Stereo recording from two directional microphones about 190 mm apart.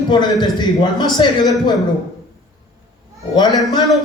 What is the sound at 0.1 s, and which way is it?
A man's voice, 25° left (ahead or behind).